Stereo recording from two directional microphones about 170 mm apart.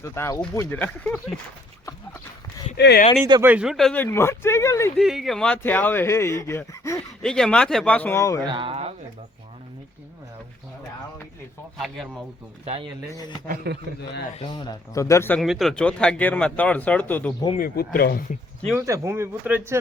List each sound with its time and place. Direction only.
0.0 s speech: 15° left (ahead or behind)
2.7 s speech: 75° left (ahead or behind)
3.4 s speech: 5° right (ahead or behind); by 4.9 s 15° left (ahead or behind)
4.9 s speech: centre (ahead or behind); by 7.0 s 15° left (ahead or behind)
7.2 s speech: 5° left (ahead or behind)
8.4 s speech: 30° right (ahead or behind)
11.8 s speech: centre (ahead or behind)
12.6 s speech: 35° right (ahead or behind)
13.7 s a man's voice: 75° right (ahead or behind)
14.3 s speech: 25° left (ahead or behind)
15.4 s speech: centre (ahead or behind)
17.6 s speech: 60° left (ahead or behind)
18.8 s a man's voice: 20° right (ahead or behind)